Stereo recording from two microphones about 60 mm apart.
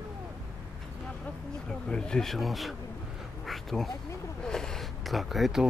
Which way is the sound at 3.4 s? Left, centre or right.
Centre.